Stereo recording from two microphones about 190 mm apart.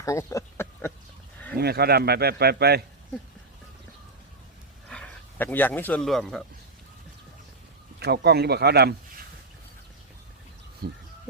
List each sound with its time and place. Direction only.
0.0 s speech: 15° left (ahead or behind)
1.5 s a man's voice: 55° right (ahead or behind)
4.9 s speech: 5° left (ahead or behind)
7.9 s a man's voice: 60° right (ahead or behind)
10.8 s a man's voice: 60° right (ahead or behind)